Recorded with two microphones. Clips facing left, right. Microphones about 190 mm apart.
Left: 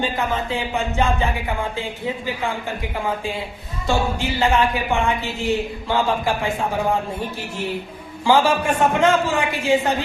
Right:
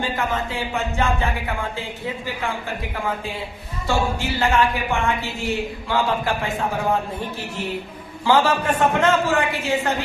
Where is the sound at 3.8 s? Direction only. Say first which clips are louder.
Left 1 dB; 15° left (ahead or behind).